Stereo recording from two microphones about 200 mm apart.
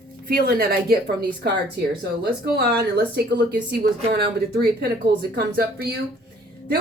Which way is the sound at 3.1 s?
55° right (ahead or behind).